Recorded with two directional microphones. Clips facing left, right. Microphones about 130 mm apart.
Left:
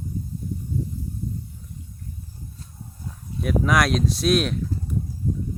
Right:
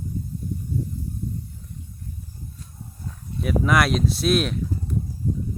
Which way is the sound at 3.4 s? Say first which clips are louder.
Even; centre (ahead or behind).